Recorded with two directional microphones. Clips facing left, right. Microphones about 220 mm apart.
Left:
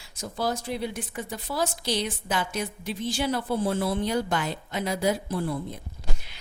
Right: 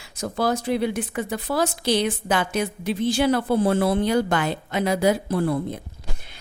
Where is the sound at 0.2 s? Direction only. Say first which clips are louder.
Right 6 dB; 70° right (ahead or behind).